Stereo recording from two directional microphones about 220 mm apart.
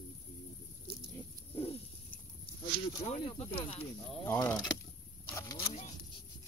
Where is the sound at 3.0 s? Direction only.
30° left (ahead or behind).